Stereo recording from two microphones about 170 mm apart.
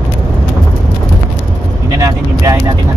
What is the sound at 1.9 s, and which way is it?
Vehicle, 20° right (ahead or behind).